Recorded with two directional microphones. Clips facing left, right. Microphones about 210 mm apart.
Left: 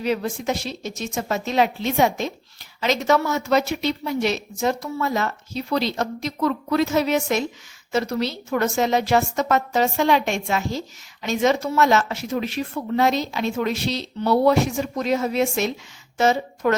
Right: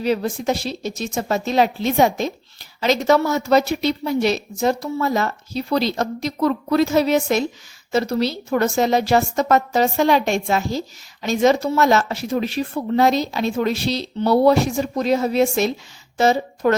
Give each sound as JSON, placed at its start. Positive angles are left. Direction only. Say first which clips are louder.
{"t": 0.0, "sound": "a woman's voice", "louder": "right 3 dB", "side_deg": -35}